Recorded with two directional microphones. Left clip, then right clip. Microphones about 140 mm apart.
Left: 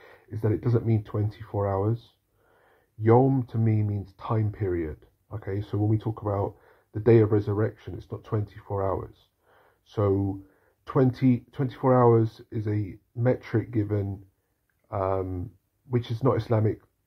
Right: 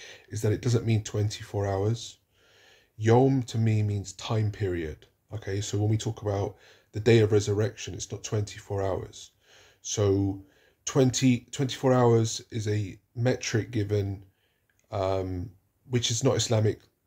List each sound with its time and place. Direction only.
0.4 s speech: 15° right (ahead or behind)